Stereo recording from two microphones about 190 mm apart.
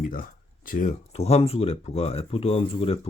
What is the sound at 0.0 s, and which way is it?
Speech, 45° left (ahead or behind).